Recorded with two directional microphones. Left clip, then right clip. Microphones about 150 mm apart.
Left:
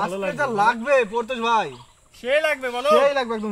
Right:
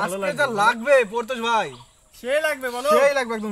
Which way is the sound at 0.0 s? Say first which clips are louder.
Right 1 dB; 15° right (ahead or behind).